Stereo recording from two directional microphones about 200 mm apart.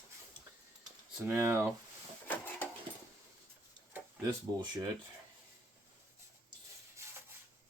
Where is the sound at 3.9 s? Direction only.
20° right (ahead or behind).